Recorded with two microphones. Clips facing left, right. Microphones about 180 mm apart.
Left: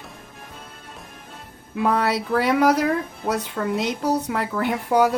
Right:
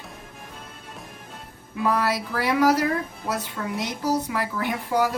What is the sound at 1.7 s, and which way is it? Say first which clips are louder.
Speech: left 2 dB; 60° left (ahead or behind).